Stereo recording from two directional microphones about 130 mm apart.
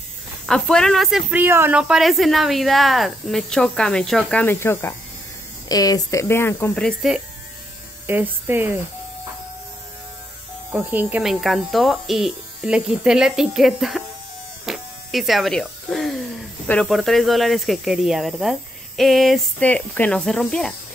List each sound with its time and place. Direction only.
0.5 s speech: 5° left (ahead or behind)
1.3 s speech: 15° right (ahead or behind)
1.8 s speech: 5° right (ahead or behind); by 4.9 s 20° left (ahead or behind)
5.7 s speech: 30° left (ahead or behind)
6.7 s speech: 5° left (ahead or behind)
8.1 s speech: 15° right (ahead or behind)
10.7 s speech: 15° right (ahead or behind)
11.2 s speech: centre (ahead or behind)
14.7 s electric shaver: centre (ahead or behind)
16.8 s speech: centre (ahead or behind)